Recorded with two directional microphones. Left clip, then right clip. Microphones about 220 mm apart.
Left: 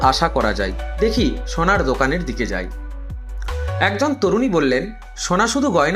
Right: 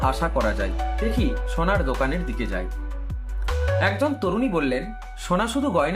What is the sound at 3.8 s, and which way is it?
Speech, 15° left (ahead or behind).